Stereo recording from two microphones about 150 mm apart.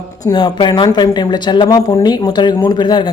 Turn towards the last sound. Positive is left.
turn(degrees=30)  # may be behind; listen again after turning